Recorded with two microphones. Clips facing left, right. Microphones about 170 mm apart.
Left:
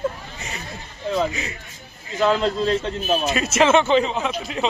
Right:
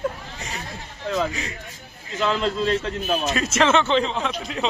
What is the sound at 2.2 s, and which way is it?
Speech, 40° left (ahead or behind).